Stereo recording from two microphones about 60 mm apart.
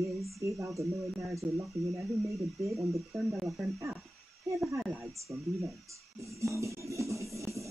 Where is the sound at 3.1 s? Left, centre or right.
Centre.